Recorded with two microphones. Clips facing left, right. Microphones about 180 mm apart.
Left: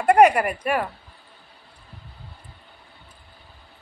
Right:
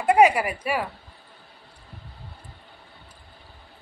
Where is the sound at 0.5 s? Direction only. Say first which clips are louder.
Left 3 dB; 50° left (ahead or behind).